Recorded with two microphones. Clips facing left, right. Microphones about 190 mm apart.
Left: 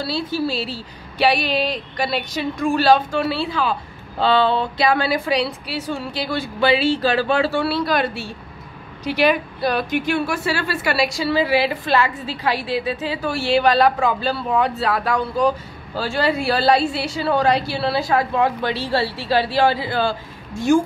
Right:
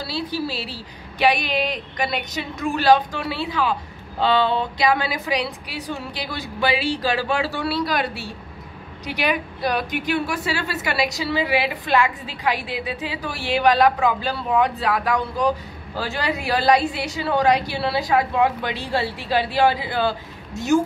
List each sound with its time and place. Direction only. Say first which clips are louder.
0.1 s a woman's voice: left 2 dB; 10° right (ahead or behind)